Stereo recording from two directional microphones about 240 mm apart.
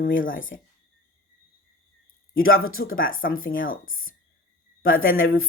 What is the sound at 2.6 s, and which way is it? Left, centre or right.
Speech, left.